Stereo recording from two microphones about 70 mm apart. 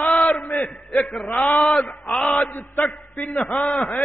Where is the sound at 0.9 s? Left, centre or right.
Centre.